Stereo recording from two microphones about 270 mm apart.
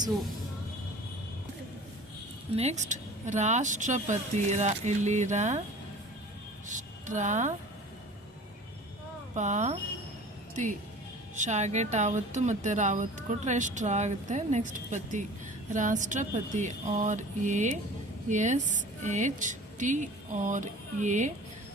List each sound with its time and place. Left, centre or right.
2.6 s speech: right
6.7 s speech: right
9.3 s speech: right